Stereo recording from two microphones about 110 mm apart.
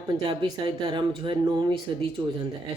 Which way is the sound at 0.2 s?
40° right (ahead or behind).